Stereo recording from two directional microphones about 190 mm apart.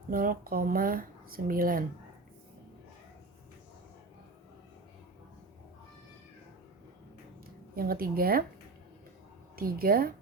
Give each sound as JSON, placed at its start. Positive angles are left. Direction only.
{"t": 0.1, "sound": "speech", "side_deg": -50}
{"t": 7.8, "sound": "speech", "side_deg": -50}
{"t": 9.6, "sound": "speech", "side_deg": -50}